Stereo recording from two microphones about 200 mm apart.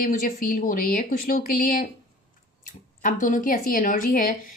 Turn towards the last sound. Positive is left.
turn(degrees=45)  # may be behind; listen again after turning